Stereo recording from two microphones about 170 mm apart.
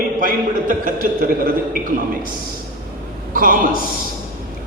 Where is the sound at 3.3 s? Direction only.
55° right (ahead or behind).